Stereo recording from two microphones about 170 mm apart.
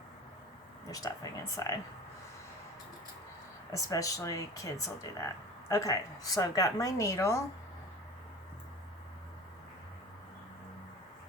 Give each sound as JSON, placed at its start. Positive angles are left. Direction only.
{"t": 0.9, "sound": "speech", "side_deg": 20}
{"t": 3.7, "sound": "speech", "side_deg": 20}